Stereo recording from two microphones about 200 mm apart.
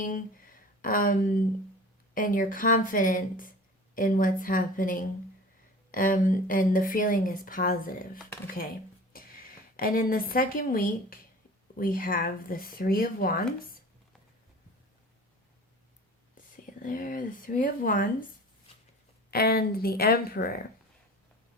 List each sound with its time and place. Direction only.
0.0 s a woman's voice: 45° left (ahead or behind)
16.8 s speech: 40° left (ahead or behind)
19.3 s speech: 50° left (ahead or behind)